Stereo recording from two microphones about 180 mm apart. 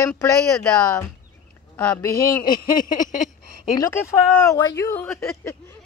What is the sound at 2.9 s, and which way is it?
Speech, 45° left (ahead or behind).